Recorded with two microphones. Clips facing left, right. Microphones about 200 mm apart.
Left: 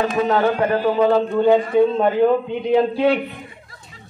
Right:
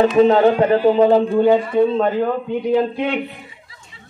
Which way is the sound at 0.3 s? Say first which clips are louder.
Right 4 dB; 20° right (ahead or behind).